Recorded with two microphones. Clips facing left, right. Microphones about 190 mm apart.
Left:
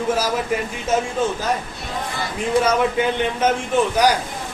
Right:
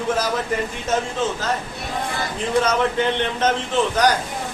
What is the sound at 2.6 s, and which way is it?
Speech, 10° left (ahead or behind).